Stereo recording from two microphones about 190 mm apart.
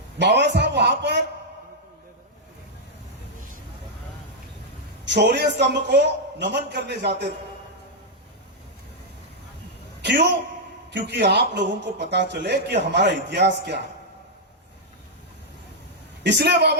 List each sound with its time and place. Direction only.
0.2 s speech: 65° right (ahead or behind)
5.0 s speech: 65° right (ahead or behind)
10.0 s a man's voice: 60° right (ahead or behind)
16.2 s speech: 60° right (ahead or behind)